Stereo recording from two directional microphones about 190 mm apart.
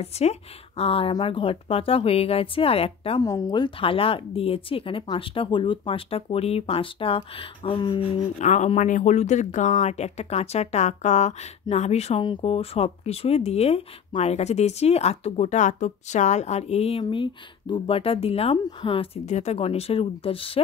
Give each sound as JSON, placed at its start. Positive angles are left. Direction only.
{"t": 0.0, "sound": "speech", "side_deg": 35}
{"t": 3.2, "sound": "speech", "side_deg": 20}